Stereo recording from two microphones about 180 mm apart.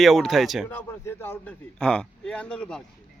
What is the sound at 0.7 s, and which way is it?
Speech, 10° left (ahead or behind).